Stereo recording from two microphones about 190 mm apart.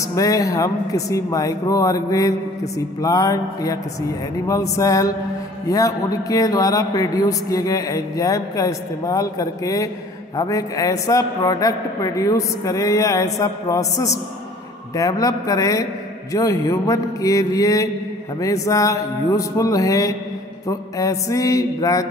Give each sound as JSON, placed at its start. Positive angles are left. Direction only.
{"t": 0.1, "sound": "a man's voice", "side_deg": 20}
{"t": 3.0, "sound": "music", "side_deg": 20}
{"t": 4.5, "sound": "a man's voice", "side_deg": 15}